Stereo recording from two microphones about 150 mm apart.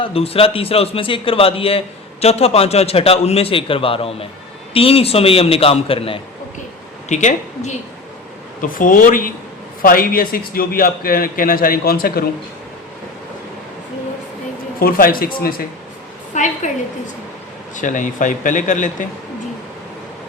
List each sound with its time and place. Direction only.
0.0 s a man's voice: 40° left (ahead or behind)
7.1 s a woman's voice: 50° left (ahead or behind)
8.6 s a man's voice: 65° left (ahead or behind); by 12.2 s 90° left
14.8 s speech: 80° left
16.3 s a woman's voice: 55° left (ahead or behind)
17.7 s speech: 60° left (ahead or behind)